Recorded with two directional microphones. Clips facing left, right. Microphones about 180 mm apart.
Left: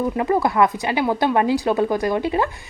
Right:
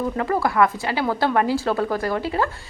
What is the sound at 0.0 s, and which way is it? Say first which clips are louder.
A woman's voice: left 3 dB; 20° left (ahead or behind).